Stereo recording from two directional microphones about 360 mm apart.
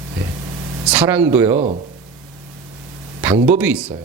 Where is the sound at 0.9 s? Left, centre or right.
Centre.